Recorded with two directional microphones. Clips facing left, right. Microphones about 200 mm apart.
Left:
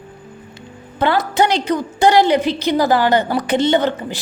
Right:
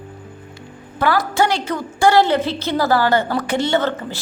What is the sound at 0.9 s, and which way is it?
A woman's voice, 20° left (ahead or behind).